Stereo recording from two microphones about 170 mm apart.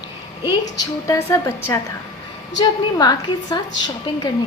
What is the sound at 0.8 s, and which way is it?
A woman's voice, 20° left (ahead or behind).